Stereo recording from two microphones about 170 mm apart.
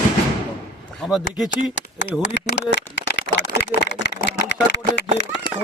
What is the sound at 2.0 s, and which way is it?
Speech, 90° left.